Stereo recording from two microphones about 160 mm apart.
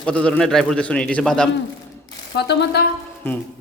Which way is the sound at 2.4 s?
90° left.